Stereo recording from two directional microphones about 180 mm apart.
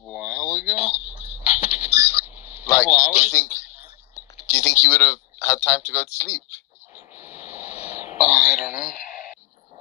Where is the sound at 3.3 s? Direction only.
15° left (ahead or behind).